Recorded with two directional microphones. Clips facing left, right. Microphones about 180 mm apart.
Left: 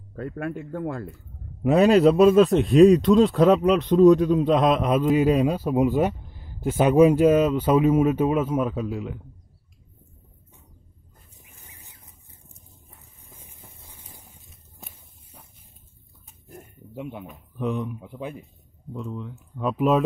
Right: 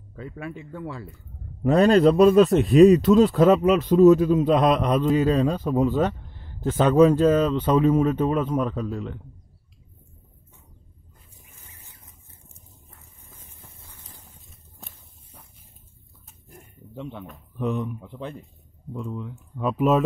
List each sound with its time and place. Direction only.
0.1 s a man's voice: 55° left (ahead or behind)
1.6 s a man's voice: 5° left (ahead or behind)
11.3 s a sound: 15° left (ahead or behind)
13.3 s a sound: 10° left (ahead or behind)
14.4 s walk: centre (ahead or behind)
16.9 s a man's voice: 10° left (ahead or behind)
17.6 s speech: centre (ahead or behind)